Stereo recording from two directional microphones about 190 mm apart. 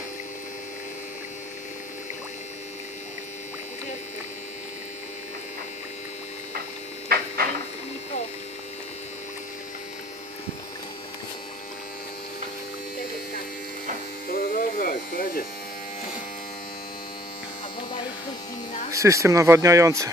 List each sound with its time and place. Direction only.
7.1 s a sound: 50° right (ahead or behind)
14.3 s electric shaver: 50° left (ahead or behind)
18.9 s speech: 15° right (ahead or behind)